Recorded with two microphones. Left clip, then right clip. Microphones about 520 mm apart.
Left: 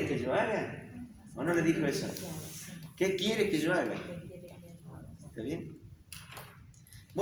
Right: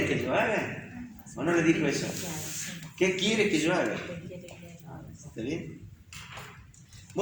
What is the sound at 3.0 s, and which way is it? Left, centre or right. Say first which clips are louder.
Speech: right 4 dB; left.